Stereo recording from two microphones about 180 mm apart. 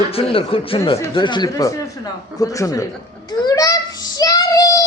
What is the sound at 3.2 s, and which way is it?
Child singing, 20° left (ahead or behind).